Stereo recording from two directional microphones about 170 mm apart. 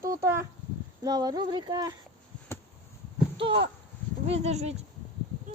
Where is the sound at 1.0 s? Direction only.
25° right (ahead or behind).